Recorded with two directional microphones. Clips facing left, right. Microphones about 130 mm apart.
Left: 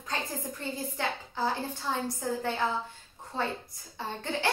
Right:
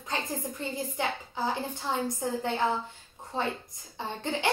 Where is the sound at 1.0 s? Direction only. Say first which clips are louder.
Even; 15° right (ahead or behind).